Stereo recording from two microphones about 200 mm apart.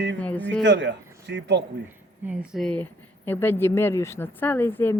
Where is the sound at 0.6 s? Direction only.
60° right (ahead or behind).